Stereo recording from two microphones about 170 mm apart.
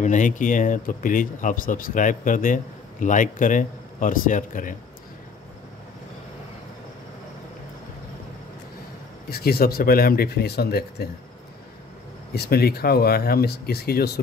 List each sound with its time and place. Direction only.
0.0 s speech: 50° left (ahead or behind)
9.3 s speech: 65° left (ahead or behind)
12.4 s speech: 65° left (ahead or behind)